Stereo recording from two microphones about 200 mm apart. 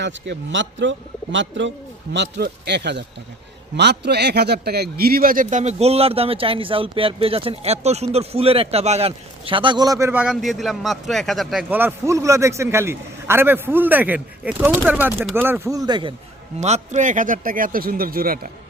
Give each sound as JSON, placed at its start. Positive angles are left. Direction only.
{"t": 0.0, "sound": "a man's voice", "side_deg": -65}
{"t": 16.6, "sound": "speech", "side_deg": -35}